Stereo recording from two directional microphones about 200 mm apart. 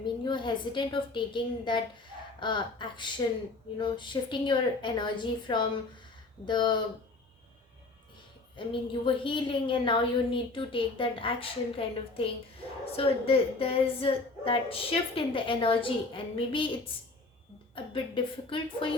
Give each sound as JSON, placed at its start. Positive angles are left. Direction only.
{"t": 0.3, "sound": "a woman's voice", "side_deg": 25}
{"t": 8.5, "sound": "a woman's voice", "side_deg": 25}